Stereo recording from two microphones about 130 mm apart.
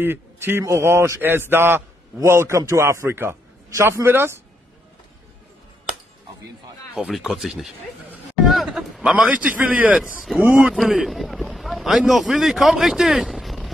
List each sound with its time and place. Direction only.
0.0 s a man's voice: 15° right (ahead or behind)
7.0 s a man's voice: 5° right (ahead or behind)